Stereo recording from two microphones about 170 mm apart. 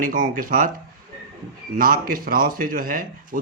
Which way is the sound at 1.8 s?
55° right (ahead or behind).